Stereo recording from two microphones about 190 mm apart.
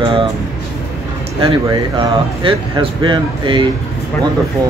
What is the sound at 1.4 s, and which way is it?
Speech, 25° right (ahead or behind).